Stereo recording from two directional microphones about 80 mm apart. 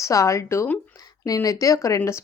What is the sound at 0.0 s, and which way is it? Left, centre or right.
A woman's voice, left.